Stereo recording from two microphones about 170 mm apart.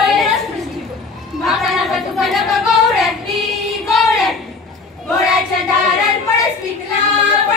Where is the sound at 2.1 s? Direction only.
Centre (ahead or behind).